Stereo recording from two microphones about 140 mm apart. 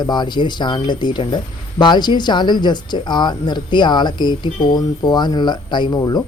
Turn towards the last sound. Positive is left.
turn(degrees=30)  # may be behind; listen again after turning